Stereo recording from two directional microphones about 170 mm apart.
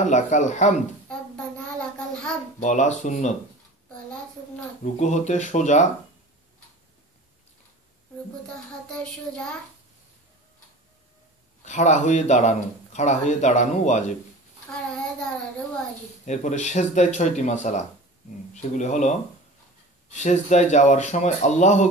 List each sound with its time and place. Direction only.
0.0 s speech: 45° left (ahead or behind)
1.0 s child singing: 5° left (ahead or behind)
2.6 s speech: 45° left (ahead or behind)
4.9 s speech: 45° left (ahead or behind)
8.9 s child singing: 5° left (ahead or behind)
11.6 s speech: 45° left (ahead or behind)
16.3 s speech: 45° left (ahead or behind)